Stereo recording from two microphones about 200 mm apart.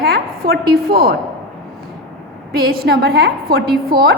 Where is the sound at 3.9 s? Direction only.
20° right (ahead or behind).